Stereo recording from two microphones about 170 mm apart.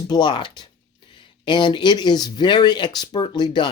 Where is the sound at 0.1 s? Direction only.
25° left (ahead or behind).